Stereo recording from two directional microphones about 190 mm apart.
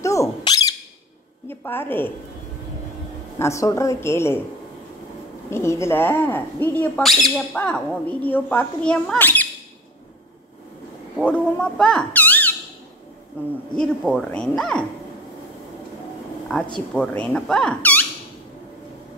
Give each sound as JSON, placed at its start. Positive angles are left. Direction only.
{"t": 0.0, "sound": "a sound", "side_deg": 15}
{"t": 1.5, "sound": "a woman's voice", "side_deg": 10}
{"t": 3.3, "sound": "a woman's voice", "side_deg": 15}
{"t": 5.5, "sound": "a woman's voice", "side_deg": 15}
{"t": 11.1, "sound": "speech", "side_deg": 5}
{"t": 13.7, "sound": "speech", "side_deg": 5}
{"t": 16.9, "sound": "speech", "side_deg": 5}